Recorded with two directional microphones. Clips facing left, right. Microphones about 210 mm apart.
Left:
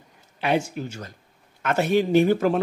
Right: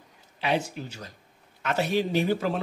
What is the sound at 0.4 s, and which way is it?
A man's voice, 50° left (ahead or behind).